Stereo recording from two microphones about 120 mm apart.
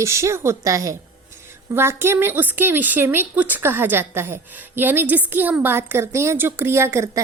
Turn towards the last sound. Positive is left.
turn(degrees=-25)  # may be behind; listen again after turning